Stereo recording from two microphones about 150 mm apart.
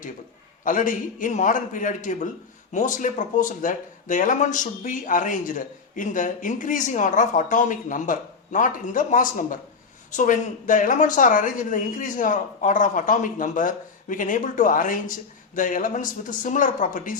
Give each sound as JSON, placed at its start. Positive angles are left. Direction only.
{"t": 0.6, "sound": "speech", "side_deg": 65}